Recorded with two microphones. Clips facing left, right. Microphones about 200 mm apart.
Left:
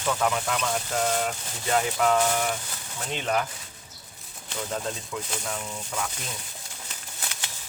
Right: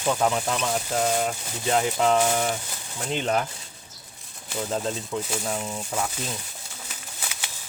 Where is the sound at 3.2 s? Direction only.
30° right (ahead or behind).